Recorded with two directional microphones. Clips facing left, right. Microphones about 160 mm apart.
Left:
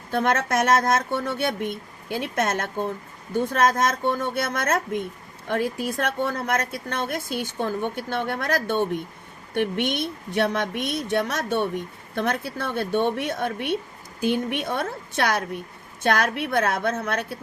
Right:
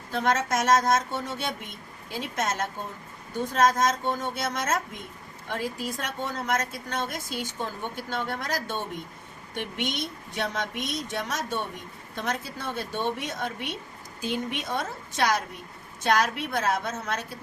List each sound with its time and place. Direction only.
0.1 s a woman's voice: 60° left (ahead or behind)